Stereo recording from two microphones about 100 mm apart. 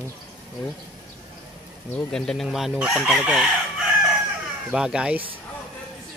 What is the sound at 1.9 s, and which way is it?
Chicken, 5° left (ahead or behind).